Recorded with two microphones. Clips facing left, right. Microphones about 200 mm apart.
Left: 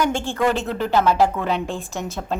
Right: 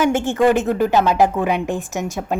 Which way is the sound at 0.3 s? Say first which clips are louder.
Right 6 dB; 15° right (ahead or behind).